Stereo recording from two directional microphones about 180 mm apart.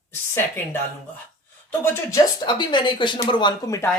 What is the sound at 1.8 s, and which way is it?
Speech, 15° left (ahead or behind).